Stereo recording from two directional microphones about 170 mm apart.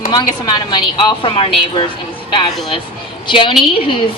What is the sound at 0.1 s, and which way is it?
Speech, 25° left (ahead or behind).